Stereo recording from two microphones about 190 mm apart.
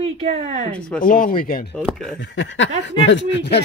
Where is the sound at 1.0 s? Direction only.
45° left (ahead or behind).